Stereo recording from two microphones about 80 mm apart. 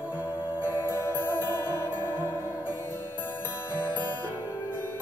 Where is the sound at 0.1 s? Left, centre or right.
Left.